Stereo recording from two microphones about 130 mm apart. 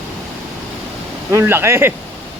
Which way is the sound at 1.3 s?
20° right (ahead or behind).